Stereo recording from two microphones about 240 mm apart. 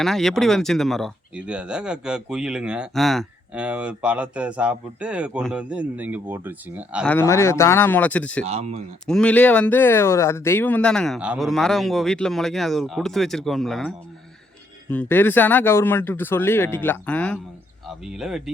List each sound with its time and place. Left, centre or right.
0.0 s speech: centre
7.0 s speech: centre
8.4 s speech: right
9.0 s speech: centre